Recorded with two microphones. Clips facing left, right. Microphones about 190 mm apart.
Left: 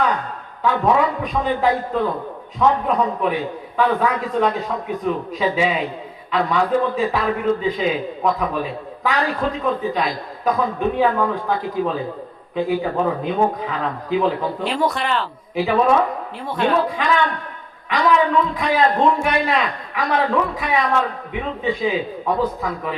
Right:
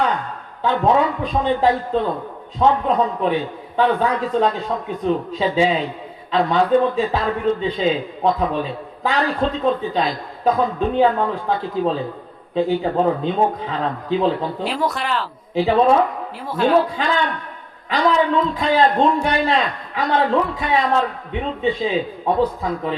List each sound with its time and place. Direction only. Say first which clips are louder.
0.6 s a man's voice: right 1 dB; 30° right (ahead or behind)
14.6 s speech: left 1 dB; centre (ahead or behind)
15.5 s a man's voice: right 2 dB; 30° right (ahead or behind)
16.5 s speech: right 2 dB; 5° right (ahead or behind)
17.0 s a man's voice: left 1 dB; 30° right (ahead or behind)